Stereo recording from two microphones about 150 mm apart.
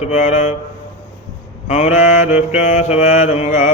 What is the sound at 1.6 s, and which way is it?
Mantra, 50° left (ahead or behind).